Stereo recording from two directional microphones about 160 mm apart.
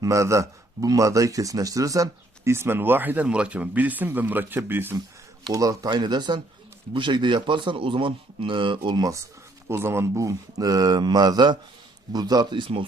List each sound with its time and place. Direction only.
0.0 s a man's voice: 20° right (ahead or behind)